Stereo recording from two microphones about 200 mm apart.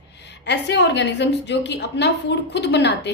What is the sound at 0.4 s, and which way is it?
A woman's voice, 60° left (ahead or behind).